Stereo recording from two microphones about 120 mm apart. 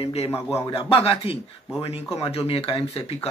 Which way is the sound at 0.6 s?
50° left (ahead or behind).